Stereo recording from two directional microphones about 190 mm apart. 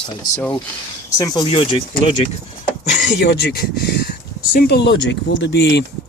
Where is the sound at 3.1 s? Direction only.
65° left (ahead or behind).